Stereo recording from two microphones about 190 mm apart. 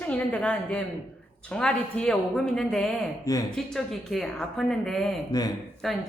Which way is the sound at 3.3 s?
20° left (ahead or behind).